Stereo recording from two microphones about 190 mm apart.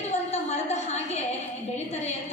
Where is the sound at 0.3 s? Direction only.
35° left (ahead or behind).